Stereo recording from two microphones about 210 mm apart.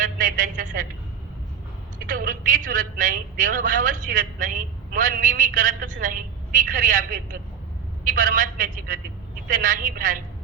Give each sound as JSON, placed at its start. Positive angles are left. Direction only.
{"t": 0.0, "sound": "a woman's voice", "side_deg": -40}
{"t": 2.0, "sound": "a woman's voice", "side_deg": -40}